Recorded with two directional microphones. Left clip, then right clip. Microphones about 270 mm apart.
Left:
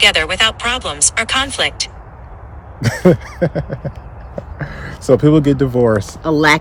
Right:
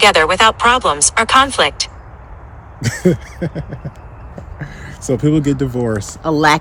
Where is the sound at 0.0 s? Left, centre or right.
Centre.